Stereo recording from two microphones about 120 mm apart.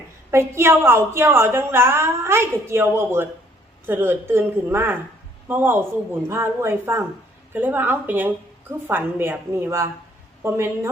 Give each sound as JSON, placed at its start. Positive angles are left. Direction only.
{"t": 0.3, "sound": "a woman's voice", "side_deg": -20}